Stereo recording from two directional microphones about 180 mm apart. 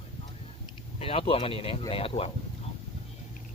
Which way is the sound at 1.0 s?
30° left (ahead or behind).